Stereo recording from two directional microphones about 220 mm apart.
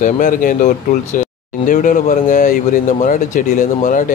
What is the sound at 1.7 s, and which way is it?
Speech, 35° left (ahead or behind).